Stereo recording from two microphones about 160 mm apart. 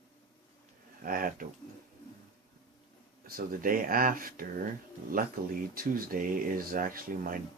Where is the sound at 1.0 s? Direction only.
60° right (ahead or behind).